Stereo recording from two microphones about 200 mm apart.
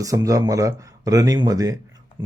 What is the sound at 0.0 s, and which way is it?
Speech, 15° right (ahead or behind).